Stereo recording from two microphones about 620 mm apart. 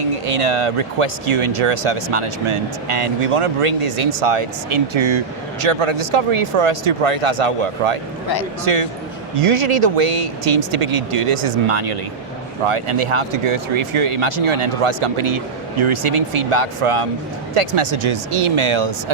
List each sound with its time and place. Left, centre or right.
0.3 s speech: right
4.7 s speech: right
9.5 s speech: right
12.6 s speech: right